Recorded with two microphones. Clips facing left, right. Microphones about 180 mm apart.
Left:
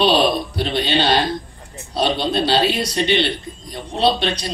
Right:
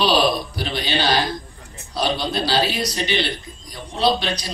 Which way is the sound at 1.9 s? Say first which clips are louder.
Left 3 dB; 25° left (ahead or behind).